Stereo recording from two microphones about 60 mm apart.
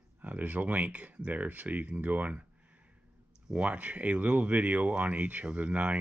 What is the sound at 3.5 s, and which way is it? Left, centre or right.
Speech, right.